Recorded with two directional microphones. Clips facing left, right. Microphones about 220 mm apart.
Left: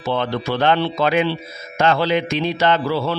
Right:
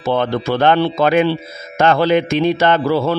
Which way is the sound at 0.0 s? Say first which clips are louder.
Right 4 dB; 50° right (ahead or behind).